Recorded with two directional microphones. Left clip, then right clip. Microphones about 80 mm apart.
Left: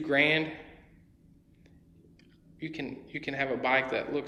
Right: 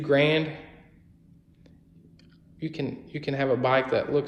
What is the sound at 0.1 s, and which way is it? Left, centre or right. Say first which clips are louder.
Speech: right 4 dB; right.